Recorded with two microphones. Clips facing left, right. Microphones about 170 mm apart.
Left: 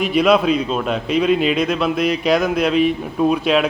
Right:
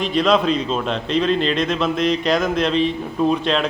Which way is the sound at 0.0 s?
10° left (ahead or behind).